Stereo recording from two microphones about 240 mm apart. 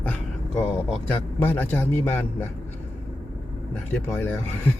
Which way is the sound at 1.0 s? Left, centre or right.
Centre.